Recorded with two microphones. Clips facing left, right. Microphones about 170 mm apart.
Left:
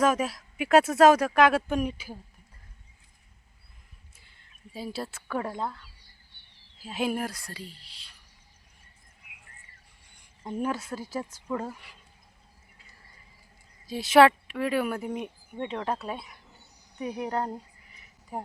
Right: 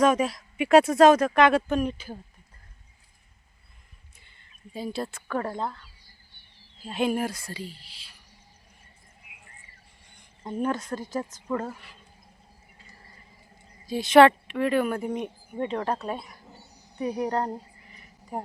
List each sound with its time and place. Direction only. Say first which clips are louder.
0.0 s speech: right 3 dB; 5° left (ahead or behind)
4.2 s speech: right 3 dB; centre (ahead or behind)
10.1 s a sound: right 2 dB; 10° left (ahead or behind)
10.6 s speech: right 3 dB; 5° left (ahead or behind)
13.8 s speech: right 2 dB; centre (ahead or behind)
17.9 s a sound: right 2 dB; centre (ahead or behind)